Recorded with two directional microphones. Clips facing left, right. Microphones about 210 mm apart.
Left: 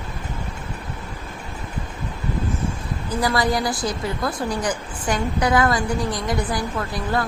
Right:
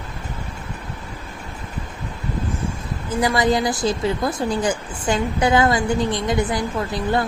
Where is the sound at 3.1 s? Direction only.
20° right (ahead or behind).